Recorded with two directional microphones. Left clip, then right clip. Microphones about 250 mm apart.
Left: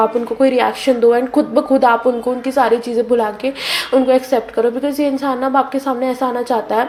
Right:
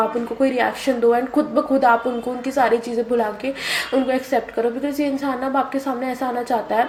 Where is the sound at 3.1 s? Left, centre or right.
Left.